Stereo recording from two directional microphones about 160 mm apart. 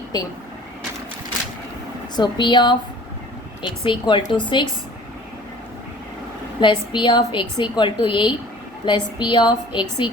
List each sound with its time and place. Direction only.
2.1 s a woman's voice: 30° left (ahead or behind)
6.6 s a woman's voice: 30° left (ahead or behind)